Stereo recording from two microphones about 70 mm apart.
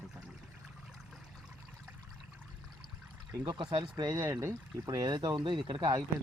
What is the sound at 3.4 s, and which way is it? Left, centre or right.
Speech, right.